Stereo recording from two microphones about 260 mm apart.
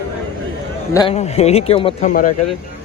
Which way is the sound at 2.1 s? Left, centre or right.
Left.